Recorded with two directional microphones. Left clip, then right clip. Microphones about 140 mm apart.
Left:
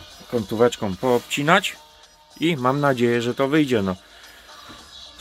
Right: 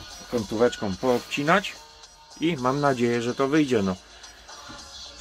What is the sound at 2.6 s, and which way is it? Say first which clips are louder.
Speech: left 3 dB; 90° left.